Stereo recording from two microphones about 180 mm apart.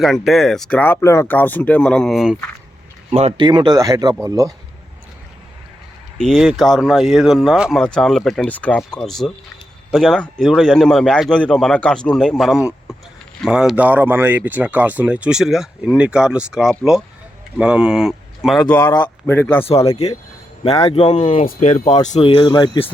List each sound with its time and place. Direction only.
0.0 s speech: centre (ahead or behind)
3.1 s speech: 35° right (ahead or behind); by 4.5 s 20° right (ahead or behind)
6.1 s speech: centre (ahead or behind)
18.7 s speech: 10° left (ahead or behind)
19.6 s speech: 35° left (ahead or behind)
21.4 s speech: 45° left (ahead or behind); by 22.9 s 25° left (ahead or behind)